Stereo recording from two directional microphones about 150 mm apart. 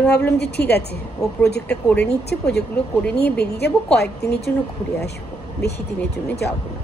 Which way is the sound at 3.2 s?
90° left.